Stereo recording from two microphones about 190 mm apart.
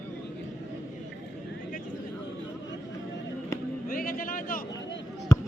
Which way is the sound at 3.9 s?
50° left (ahead or behind).